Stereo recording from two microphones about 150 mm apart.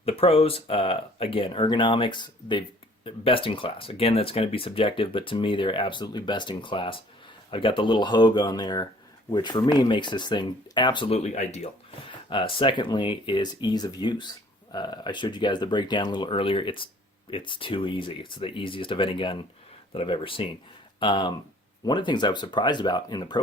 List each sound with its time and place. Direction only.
0.0 s speech: 40° left (ahead or behind)